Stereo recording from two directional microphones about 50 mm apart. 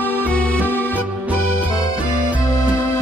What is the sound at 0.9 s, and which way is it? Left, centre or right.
Music, right.